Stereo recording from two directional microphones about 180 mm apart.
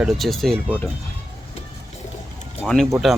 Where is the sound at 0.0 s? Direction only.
Centre (ahead or behind).